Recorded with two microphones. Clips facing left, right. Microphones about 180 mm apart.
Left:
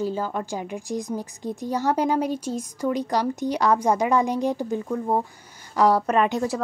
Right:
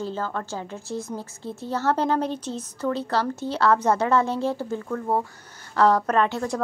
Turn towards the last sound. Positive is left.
turn(degrees=15)  # may be behind; listen again after turning